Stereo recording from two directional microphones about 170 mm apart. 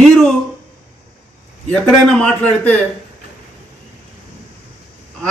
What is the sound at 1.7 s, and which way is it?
A man's voice, 5° left (ahead or behind).